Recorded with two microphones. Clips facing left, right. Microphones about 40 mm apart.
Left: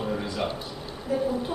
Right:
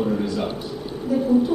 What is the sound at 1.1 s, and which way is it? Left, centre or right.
Speech, centre.